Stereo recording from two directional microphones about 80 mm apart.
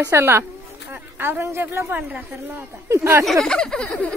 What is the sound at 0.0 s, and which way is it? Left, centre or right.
Speech, right.